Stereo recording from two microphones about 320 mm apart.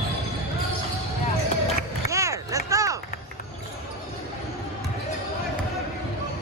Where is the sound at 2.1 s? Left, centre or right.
Centre.